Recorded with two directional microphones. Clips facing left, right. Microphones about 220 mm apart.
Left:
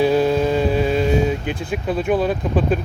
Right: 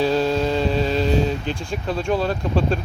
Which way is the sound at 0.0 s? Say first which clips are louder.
Left 3 dB; 15° left (ahead or behind).